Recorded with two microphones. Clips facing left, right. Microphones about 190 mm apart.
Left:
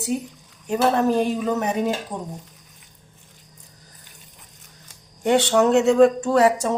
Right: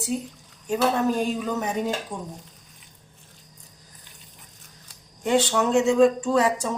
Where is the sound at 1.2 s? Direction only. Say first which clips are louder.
Left 4 dB; 65° left (ahead or behind).